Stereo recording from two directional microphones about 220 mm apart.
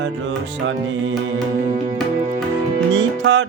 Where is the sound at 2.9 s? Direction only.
55° right (ahead or behind).